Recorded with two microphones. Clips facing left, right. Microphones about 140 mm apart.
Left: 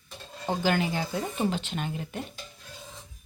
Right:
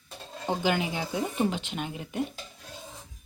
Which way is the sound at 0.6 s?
15° right (ahead or behind).